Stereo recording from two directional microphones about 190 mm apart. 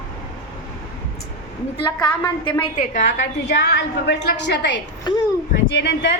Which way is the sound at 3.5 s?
65° left (ahead or behind).